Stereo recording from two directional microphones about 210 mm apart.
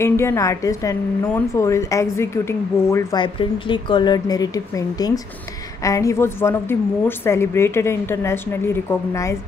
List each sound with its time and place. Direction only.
0.0 s a woman's voice: 10° left (ahead or behind)